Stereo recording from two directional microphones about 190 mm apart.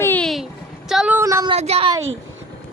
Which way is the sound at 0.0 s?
10° left (ahead or behind).